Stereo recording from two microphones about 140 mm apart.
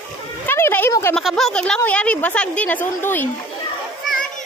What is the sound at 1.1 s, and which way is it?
A woman's voice, 5° left (ahead or behind).